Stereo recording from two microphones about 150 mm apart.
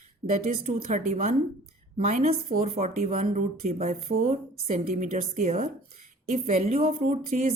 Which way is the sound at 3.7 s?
45° right (ahead or behind).